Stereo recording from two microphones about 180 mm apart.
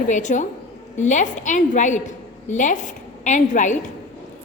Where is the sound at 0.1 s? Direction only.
45° left (ahead or behind).